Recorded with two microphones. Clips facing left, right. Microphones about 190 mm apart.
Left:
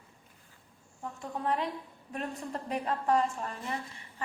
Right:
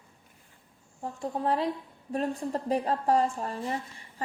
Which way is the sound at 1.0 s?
30° right (ahead or behind).